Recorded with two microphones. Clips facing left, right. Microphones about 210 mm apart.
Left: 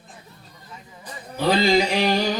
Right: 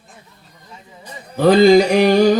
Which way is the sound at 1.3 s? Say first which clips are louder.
Right 9 dB; 50° right (ahead or behind).